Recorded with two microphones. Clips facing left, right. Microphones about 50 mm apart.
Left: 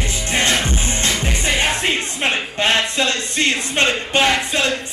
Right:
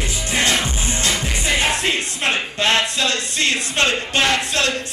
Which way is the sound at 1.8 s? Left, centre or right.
Centre.